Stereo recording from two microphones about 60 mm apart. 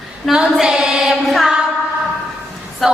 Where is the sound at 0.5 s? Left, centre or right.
Centre.